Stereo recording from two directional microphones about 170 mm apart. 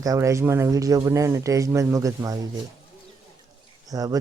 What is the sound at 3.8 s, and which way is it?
Speech, 20° right (ahead or behind).